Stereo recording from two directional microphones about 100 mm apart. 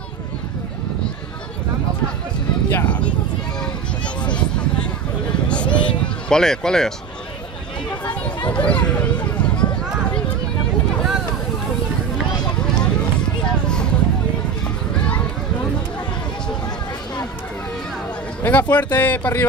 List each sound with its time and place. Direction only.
2.7 s speech: 15° left (ahead or behind)
4.2 s speech: 10° left (ahead or behind)
7.9 s chatter: 15° left (ahead or behind)
8.5 s a sound: 15° left (ahead or behind)
18.4 s speech: 15° left (ahead or behind)